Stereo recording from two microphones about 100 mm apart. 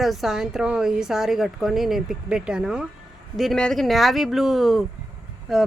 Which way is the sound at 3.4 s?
5° left (ahead or behind).